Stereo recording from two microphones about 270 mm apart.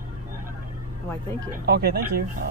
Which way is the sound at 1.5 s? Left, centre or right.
Right.